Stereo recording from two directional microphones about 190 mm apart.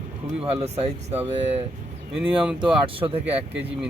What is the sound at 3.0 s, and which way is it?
Speech, 15° right (ahead or behind).